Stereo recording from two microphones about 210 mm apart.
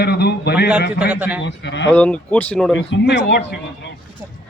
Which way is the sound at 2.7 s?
55° left (ahead or behind).